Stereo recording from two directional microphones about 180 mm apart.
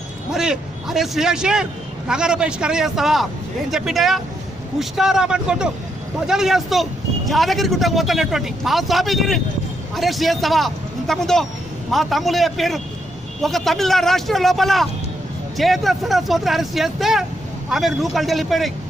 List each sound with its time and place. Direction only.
0.3 s speech: 5° right (ahead or behind)